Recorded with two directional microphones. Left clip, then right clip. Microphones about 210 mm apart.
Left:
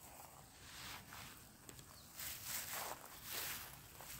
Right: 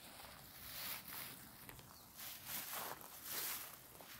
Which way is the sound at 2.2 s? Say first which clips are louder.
Left 2 dB; 10° left (ahead or behind).